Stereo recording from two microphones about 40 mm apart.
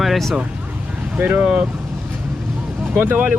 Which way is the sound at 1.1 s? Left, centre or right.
Right.